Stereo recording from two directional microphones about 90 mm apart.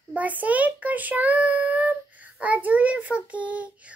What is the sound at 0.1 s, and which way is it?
A child's voice, 15° right (ahead or behind).